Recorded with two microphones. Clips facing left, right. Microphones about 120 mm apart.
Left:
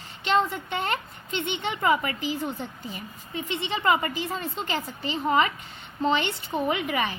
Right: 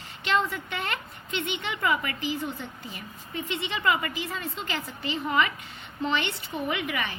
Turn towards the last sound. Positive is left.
turn(degrees=35)  # may be behind; listen again after turning